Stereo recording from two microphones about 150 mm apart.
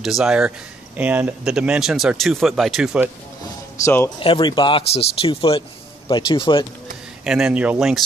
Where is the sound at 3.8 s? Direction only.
15° left (ahead or behind).